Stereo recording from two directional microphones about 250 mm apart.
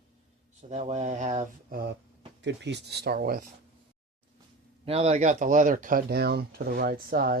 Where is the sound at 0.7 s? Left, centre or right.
Right.